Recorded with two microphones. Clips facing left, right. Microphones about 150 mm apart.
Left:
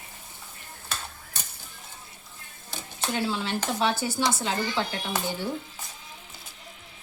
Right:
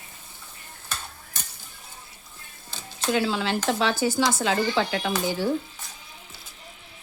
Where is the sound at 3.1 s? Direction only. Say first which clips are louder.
Right 3 dB; 90° right.